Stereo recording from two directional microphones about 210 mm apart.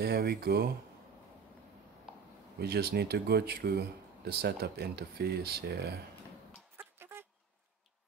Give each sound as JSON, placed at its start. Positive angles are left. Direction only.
{"t": 0.0, "sound": "speech", "side_deg": -50}
{"t": 2.6, "sound": "speech", "side_deg": -50}
{"t": 6.8, "sound": "a sound", "side_deg": -10}